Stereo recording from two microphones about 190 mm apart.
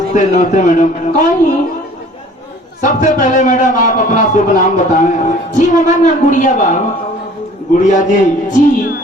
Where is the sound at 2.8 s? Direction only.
40° left (ahead or behind).